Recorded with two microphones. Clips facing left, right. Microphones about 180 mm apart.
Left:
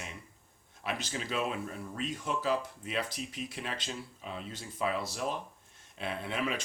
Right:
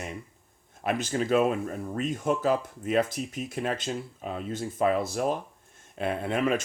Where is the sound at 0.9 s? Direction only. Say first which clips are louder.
Right 10 dB; 50° right (ahead or behind).